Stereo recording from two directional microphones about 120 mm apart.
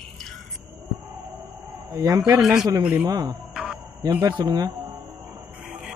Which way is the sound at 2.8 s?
10° right (ahead or behind).